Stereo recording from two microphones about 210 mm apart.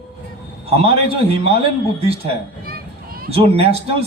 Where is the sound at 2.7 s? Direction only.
45° right (ahead or behind).